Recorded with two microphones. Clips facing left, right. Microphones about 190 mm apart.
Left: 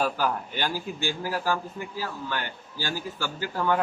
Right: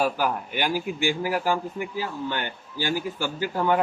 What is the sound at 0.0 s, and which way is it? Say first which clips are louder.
A man's voice: right 2 dB; 10° right (ahead or behind).